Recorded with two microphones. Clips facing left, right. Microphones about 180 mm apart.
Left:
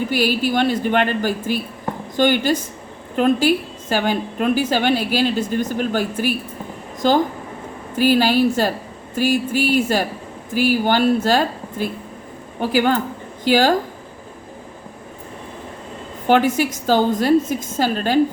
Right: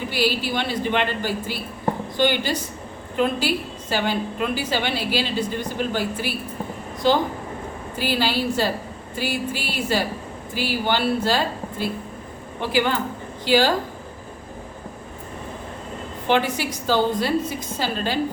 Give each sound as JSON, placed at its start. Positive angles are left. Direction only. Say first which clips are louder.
{"t": 0.1, "sound": "a woman's voice", "louder": "left 2 dB", "side_deg": 50}
{"t": 7.9, "sound": "a woman's voice", "louder": "left 8 dB", "side_deg": 50}
{"t": 16.2, "sound": "a woman's voice", "louder": "left 5 dB", "side_deg": 45}